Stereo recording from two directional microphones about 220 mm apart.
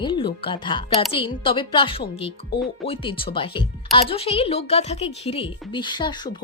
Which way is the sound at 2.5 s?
50° left (ahead or behind).